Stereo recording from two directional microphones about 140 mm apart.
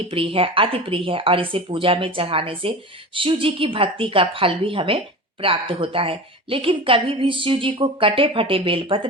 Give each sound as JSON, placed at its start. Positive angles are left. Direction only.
{"t": 0.1, "sound": "a woman's voice", "side_deg": -40}